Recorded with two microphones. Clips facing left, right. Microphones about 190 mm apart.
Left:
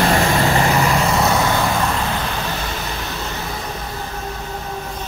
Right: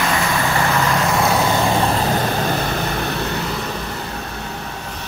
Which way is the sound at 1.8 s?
40° right (ahead or behind).